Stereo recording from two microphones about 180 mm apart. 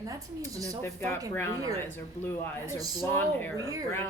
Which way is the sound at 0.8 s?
15° left (ahead or behind).